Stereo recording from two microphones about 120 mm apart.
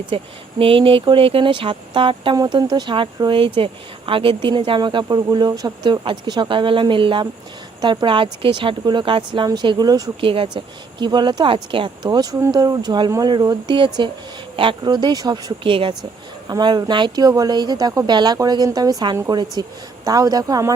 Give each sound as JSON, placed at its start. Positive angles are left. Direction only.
{"t": 0.1, "sound": "speech", "side_deg": -50}
{"t": 10.2, "sound": "speech", "side_deg": -50}
{"t": 15.6, "sound": "speech", "side_deg": -45}